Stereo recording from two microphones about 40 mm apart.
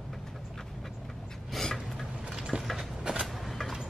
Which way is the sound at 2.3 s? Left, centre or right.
Centre.